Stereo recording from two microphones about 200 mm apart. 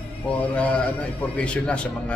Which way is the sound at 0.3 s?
5° left (ahead or behind).